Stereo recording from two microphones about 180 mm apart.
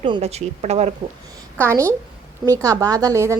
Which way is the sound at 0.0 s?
30° right (ahead or behind).